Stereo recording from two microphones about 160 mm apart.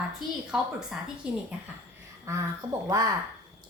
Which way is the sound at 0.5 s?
5° right (ahead or behind).